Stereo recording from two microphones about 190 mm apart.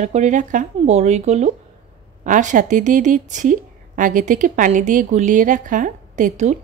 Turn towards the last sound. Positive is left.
turn(degrees=-35)  # may be behind; listen again after turning